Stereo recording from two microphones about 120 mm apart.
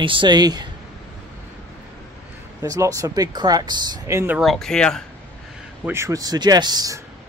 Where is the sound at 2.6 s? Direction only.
30° right (ahead or behind).